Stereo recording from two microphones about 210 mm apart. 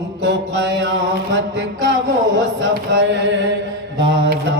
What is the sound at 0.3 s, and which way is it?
Mantra, 55° right (ahead or behind).